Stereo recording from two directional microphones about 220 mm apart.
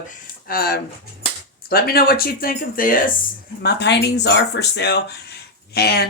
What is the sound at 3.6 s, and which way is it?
Speech, 50° left (ahead or behind).